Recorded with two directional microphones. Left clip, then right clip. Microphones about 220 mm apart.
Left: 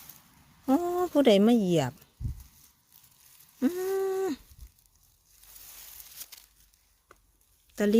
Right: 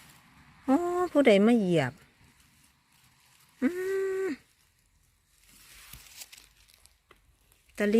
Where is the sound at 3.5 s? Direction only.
10° left (ahead or behind).